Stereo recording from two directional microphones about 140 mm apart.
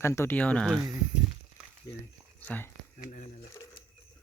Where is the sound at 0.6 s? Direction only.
Centre (ahead or behind).